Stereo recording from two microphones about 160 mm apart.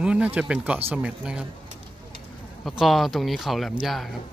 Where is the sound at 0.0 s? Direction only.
10° right (ahead or behind).